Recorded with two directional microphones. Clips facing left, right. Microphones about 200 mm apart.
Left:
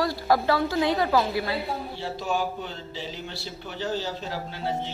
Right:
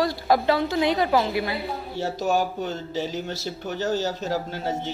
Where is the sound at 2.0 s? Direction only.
45° right (ahead or behind).